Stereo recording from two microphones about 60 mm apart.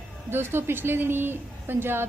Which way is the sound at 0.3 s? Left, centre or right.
Right.